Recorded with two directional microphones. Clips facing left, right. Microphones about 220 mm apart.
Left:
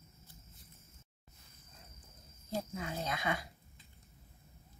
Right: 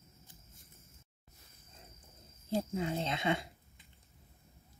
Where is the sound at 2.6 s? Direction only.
25° right (ahead or behind).